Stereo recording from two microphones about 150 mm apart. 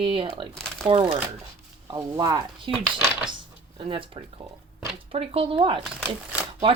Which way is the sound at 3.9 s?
35° right (ahead or behind).